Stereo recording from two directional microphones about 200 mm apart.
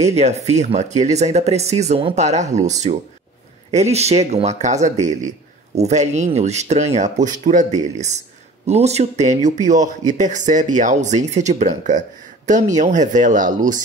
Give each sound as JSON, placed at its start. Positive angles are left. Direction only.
{"t": 0.0, "sound": "speech", "side_deg": -35}